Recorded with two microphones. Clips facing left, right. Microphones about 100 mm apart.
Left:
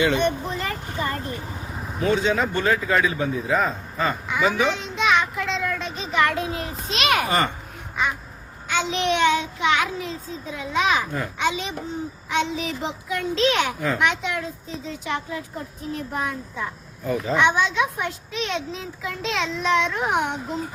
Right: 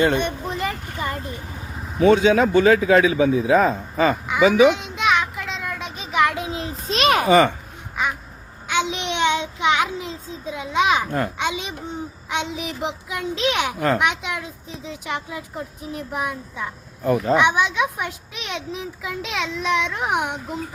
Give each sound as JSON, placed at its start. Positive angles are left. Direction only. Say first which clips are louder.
{"t": 0.2, "sound": "a sound", "louder": "left 1 dB", "side_deg": -15}
{"t": 2.3, "sound": "speech", "louder": "right 7 dB", "side_deg": -70}
{"t": 4.6, "sound": "a sound", "louder": "right 6 dB", "side_deg": -15}
{"t": 6.8, "sound": "a sound", "louder": "right 4 dB", "side_deg": -40}
{"t": 8.7, "sound": "child singing", "louder": "left 1 dB", "side_deg": -15}
{"t": 11.3, "sound": "a child's voice", "louder": "left 1 dB", "side_deg": -15}
{"t": 13.7, "sound": "a child's voice", "louder": "right 5 dB", "side_deg": -65}
{"t": 14.0, "sound": "a child's voice", "louder": "even", "side_deg": -15}
{"t": 17.0, "sound": "speech", "louder": "right 5 dB", "side_deg": -60}
{"t": 17.3, "sound": "a child's voice", "louder": "left 2 dB", "side_deg": -15}